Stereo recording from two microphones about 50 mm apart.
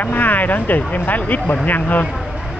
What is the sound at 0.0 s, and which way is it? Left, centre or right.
Speech, left.